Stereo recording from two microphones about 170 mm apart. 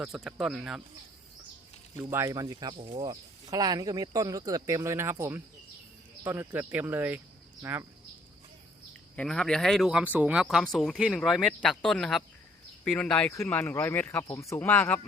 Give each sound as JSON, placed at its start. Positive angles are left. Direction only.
{"t": 0.0, "sound": "speech", "side_deg": -5}
{"t": 2.0, "sound": "speech", "side_deg": -15}
{"t": 9.1, "sound": "speech", "side_deg": 5}